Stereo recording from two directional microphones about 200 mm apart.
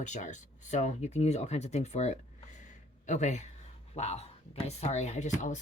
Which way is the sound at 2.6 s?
35° left (ahead or behind).